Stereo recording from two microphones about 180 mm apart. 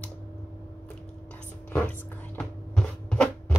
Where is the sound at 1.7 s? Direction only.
10° left (ahead or behind).